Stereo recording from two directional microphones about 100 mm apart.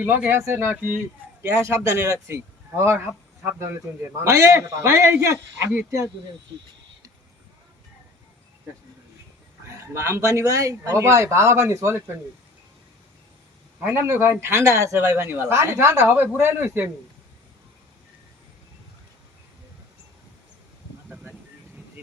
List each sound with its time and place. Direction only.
0.0 s a man's voice: 20° right (ahead or behind)
4.2 s speech: 30° right (ahead or behind)
9.6 s speech: 25° right (ahead or behind)
13.7 s speech: 25° right (ahead or behind)